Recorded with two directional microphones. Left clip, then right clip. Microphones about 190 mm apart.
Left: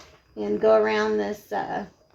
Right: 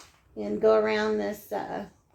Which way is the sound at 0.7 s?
40° left (ahead or behind).